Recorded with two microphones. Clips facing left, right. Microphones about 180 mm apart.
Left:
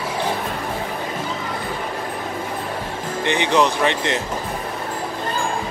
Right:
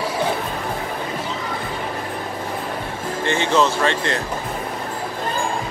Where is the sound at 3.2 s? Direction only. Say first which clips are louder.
Even; 15° left (ahead or behind).